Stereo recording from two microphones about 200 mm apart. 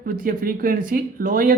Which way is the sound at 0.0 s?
45° right (ahead or behind).